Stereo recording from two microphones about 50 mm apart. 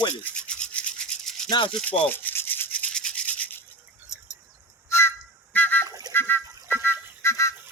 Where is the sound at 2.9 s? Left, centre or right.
Centre.